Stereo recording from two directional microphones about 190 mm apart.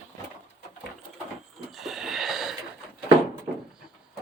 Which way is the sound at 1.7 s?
Centre (ahead or behind).